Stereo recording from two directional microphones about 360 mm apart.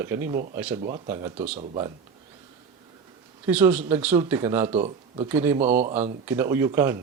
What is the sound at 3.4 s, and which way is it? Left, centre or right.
Speech, centre.